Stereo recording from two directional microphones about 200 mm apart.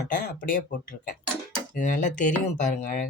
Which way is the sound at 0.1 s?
40° left (ahead or behind).